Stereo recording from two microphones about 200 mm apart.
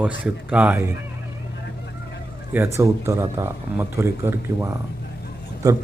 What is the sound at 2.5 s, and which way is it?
Speech, 15° right (ahead or behind).